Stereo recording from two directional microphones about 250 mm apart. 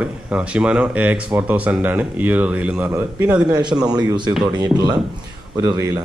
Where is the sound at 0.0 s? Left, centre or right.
Centre.